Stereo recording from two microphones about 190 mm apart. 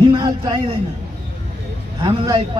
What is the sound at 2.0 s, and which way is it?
Speech, 25° right (ahead or behind).